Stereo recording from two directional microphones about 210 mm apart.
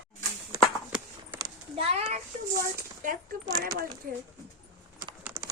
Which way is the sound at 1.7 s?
30° right (ahead or behind).